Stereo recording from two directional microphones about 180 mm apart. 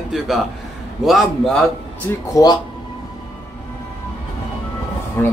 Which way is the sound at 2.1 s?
15° left (ahead or behind).